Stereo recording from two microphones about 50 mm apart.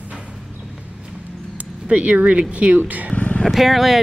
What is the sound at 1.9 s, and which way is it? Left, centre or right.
Speech, right.